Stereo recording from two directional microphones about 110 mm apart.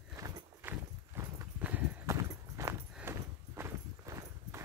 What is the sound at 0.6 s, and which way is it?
Clip-clop, 20° right (ahead or behind).